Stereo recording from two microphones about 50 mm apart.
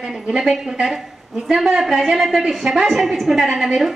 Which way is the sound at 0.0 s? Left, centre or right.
Centre.